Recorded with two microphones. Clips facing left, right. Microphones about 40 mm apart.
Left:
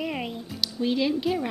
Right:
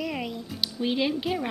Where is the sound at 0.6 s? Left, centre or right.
Centre.